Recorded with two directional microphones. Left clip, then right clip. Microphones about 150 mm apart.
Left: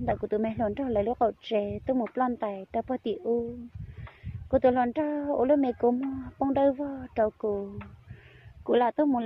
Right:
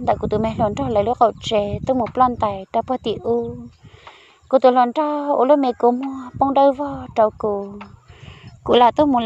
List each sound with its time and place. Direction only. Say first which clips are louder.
0.0 s speech: right 9 dB; 35° right (ahead or behind)
4.5 s speech: right 10 dB; 35° right (ahead or behind)
8.6 s speech: right 11 dB; 45° right (ahead or behind)